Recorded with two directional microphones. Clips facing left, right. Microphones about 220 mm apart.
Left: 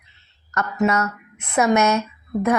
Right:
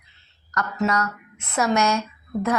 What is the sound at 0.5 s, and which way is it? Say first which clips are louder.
A woman's voice: left 3 dB; 25° left (ahead or behind).